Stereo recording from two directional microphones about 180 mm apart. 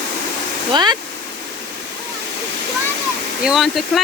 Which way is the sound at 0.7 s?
25° right (ahead or behind).